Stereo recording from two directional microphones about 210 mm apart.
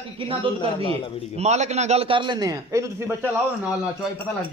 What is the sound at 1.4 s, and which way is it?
A man's voice, 30° right (ahead or behind).